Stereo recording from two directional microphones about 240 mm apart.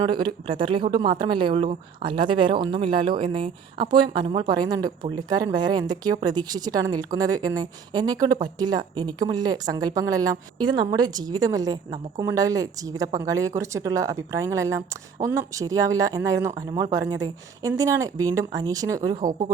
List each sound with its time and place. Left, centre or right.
0.0 s speech: centre
19.1 s speech: right